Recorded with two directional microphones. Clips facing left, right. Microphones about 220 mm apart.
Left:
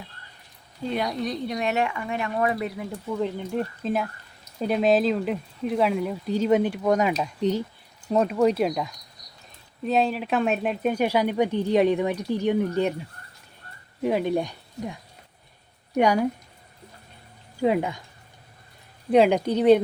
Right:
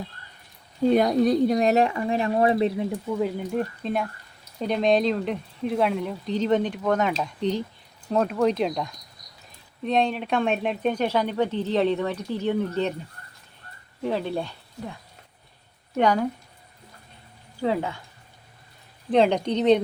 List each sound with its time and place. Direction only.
0.9 s speech: 45° right (ahead or behind); by 2.9 s 25° right (ahead or behind)
3.1 s speech: 5° right (ahead or behind); by 12.9 s 10° left (ahead or behind)
14.0 s speech: 15° left (ahead or behind)
16.0 s speech: 10° left (ahead or behind)
17.6 s speech: 15° left (ahead or behind)
19.1 s speech: 10° left (ahead or behind)